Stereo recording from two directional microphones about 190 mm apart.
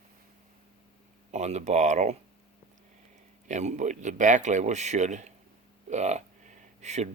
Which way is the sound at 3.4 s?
40° right (ahead or behind).